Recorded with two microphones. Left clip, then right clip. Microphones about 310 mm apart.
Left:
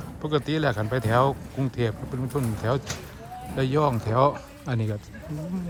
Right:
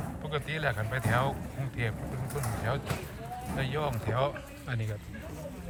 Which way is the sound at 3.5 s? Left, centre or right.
Centre.